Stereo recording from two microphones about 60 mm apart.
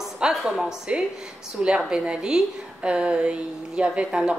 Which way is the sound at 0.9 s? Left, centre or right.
Centre.